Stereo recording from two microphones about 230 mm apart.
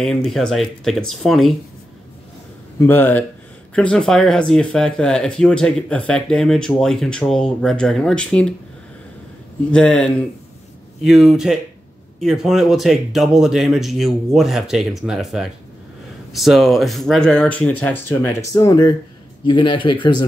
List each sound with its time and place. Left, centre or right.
0.0 s speech: centre
2.8 s speech: centre
9.7 s speech: centre